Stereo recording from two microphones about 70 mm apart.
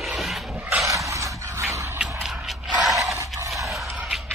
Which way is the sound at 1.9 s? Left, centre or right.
Centre.